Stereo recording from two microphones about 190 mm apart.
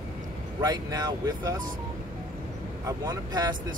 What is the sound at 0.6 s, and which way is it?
Speech, 20° right (ahead or behind).